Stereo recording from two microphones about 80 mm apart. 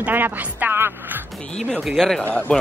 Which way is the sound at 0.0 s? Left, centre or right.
Right.